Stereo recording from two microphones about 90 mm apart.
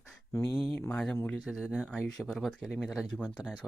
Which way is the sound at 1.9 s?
5° left (ahead or behind).